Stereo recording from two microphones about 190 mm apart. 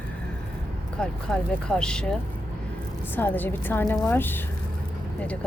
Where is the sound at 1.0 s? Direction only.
5° left (ahead or behind).